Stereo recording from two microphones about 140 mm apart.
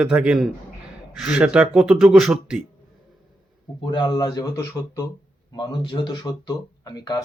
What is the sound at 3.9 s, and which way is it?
Speech, 35° left (ahead or behind).